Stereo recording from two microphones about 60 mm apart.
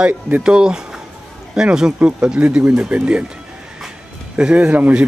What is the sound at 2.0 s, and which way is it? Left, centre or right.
Speech, right.